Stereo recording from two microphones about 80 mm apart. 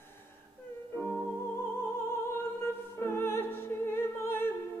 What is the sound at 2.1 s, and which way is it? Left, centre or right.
Music, left.